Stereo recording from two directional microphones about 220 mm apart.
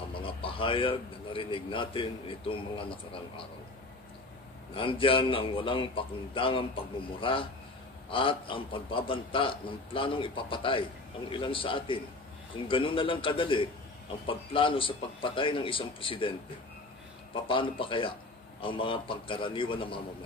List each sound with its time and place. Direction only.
0.1 s a man's voice: 25° left (ahead or behind)
4.7 s a man's voice: 25° left (ahead or behind)